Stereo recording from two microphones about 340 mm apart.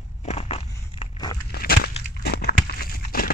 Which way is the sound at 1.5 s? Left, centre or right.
Left.